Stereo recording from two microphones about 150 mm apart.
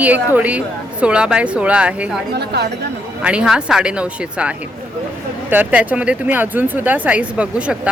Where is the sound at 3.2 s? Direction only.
5° right (ahead or behind).